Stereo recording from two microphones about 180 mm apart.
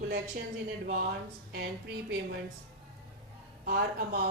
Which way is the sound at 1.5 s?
60° right (ahead or behind).